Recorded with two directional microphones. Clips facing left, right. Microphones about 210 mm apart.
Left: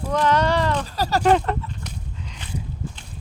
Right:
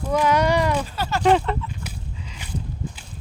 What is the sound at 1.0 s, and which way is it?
Speech, 40° left (ahead or behind).